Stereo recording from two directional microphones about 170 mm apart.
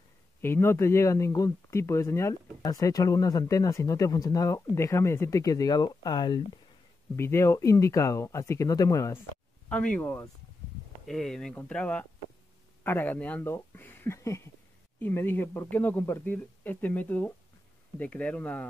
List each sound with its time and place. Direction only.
0.4 s speech: 15° left (ahead or behind)
7.2 s speech: 15° left (ahead or behind)
9.7 s speech: 5° left (ahead or behind)